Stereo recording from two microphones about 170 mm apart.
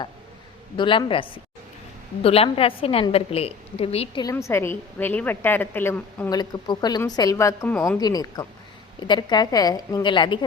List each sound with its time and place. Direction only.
0.8 s a woman's voice: 30° left (ahead or behind)
4.2 s a woman's voice: 20° left (ahead or behind)